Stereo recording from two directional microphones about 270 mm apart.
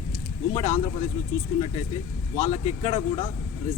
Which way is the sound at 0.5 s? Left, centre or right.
Centre.